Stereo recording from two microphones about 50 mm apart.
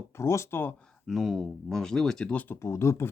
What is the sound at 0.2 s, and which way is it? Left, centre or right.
Speech, left.